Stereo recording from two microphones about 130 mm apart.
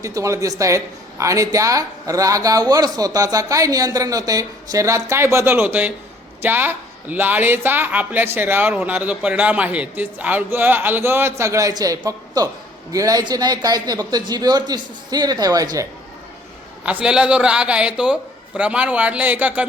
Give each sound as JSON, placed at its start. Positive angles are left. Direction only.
{"t": 0.0, "sound": "a woman's voice", "side_deg": -25}
{"t": 16.8, "sound": "a woman's voice", "side_deg": -10}